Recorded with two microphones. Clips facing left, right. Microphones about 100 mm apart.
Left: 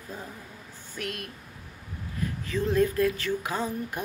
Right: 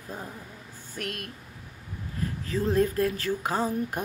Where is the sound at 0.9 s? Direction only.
50° right (ahead or behind).